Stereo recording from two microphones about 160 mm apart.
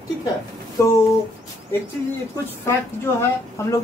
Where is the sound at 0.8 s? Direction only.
20° left (ahead or behind).